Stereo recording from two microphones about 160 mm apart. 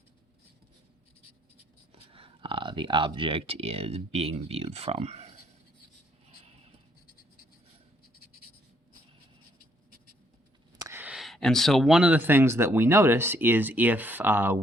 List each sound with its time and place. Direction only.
2.1 s speech: 35° right (ahead or behind)
10.8 s speech: 10° right (ahead or behind)